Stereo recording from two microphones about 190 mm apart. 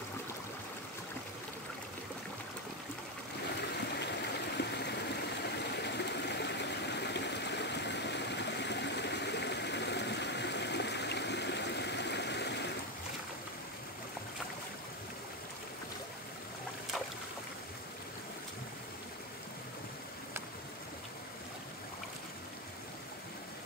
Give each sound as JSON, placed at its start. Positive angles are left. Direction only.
{"t": 4.6, "sound": "stream", "side_deg": 60}